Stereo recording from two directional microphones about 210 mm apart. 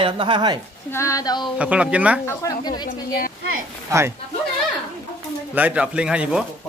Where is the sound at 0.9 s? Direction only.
15° left (ahead or behind).